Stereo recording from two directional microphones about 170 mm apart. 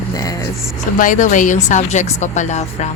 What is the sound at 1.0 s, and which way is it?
A woman's voice, 50° left (ahead or behind).